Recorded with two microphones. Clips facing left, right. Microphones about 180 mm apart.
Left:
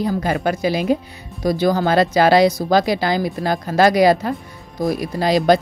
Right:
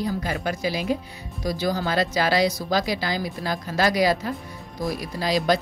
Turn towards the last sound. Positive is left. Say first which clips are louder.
# left 7 dB
turn(degrees=60)  # may be behind; listen again after turning